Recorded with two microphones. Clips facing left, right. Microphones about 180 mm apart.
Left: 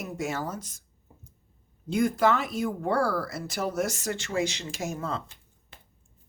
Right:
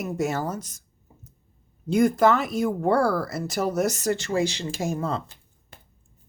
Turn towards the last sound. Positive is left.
turn(degrees=-35)  # may be behind; listen again after turning